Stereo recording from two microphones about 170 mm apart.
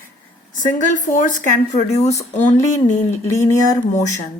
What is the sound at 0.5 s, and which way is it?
A woman's voice, 50° left (ahead or behind).